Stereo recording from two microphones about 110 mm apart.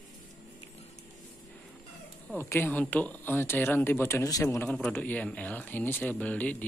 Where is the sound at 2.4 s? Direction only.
20° left (ahead or behind).